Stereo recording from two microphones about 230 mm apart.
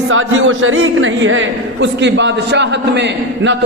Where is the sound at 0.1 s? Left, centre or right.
Right.